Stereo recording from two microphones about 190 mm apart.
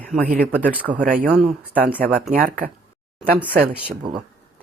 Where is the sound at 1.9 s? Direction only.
10° left (ahead or behind).